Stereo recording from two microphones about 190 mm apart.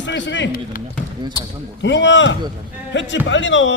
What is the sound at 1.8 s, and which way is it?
A man's voice, 70° left (ahead or behind).